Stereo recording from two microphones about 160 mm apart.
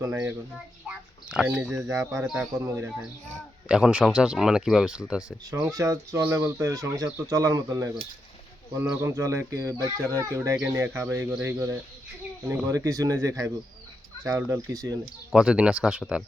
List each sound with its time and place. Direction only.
0.0 s speech: 15° right (ahead or behind)
0.9 s speech: 5° right (ahead or behind)
2.6 s speech: 15° right (ahead or behind)
3.7 s speech: 5° right (ahead or behind)
5.5 s speech: 20° right (ahead or behind)
15.3 s speech: 5° right (ahead or behind)